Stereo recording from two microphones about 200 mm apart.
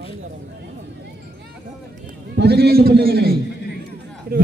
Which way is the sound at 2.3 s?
55° right (ahead or behind).